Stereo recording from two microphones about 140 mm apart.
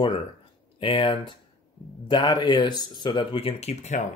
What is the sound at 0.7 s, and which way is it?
Speech, 40° left (ahead or behind).